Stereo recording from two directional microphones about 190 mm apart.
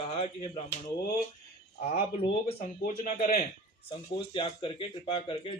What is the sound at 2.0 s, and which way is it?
Speech, 30° left (ahead or behind).